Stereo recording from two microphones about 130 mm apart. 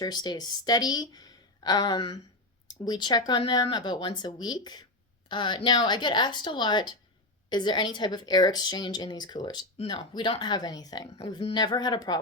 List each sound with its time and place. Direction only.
0.0 s a woman's voice: 30° left (ahead or behind)